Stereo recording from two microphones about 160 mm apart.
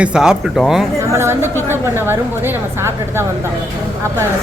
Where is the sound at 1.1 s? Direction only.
15° right (ahead or behind).